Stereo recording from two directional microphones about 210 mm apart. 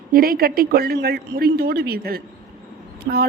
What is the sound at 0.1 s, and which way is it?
Speech, 45° right (ahead or behind).